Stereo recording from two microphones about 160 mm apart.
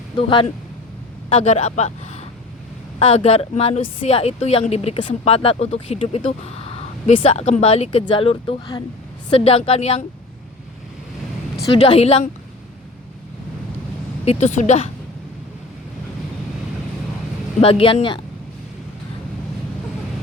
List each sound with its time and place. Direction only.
0.2 s a woman's voice: 35° left (ahead or behind)
11.7 s a woman's voice: 35° left (ahead or behind)
14.3 s speech: 45° left (ahead or behind)
17.6 s a woman's voice: 35° left (ahead or behind)